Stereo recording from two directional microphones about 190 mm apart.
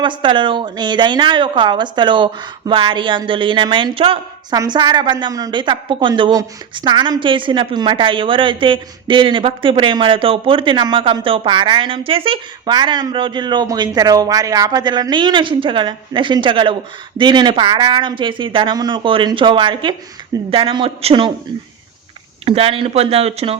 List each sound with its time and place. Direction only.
0.0 s a woman's voice: 25° right (ahead or behind)
22.4 s speech: 30° right (ahead or behind)